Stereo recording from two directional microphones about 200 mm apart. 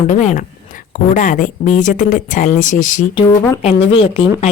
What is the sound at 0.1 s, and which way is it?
Speech, 40° left (ahead or behind).